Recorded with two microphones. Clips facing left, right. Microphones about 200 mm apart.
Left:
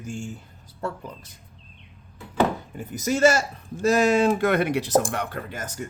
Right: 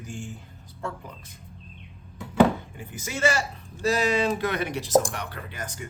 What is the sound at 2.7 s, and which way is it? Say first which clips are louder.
Speech: left 9 dB; 40° left (ahead or behind).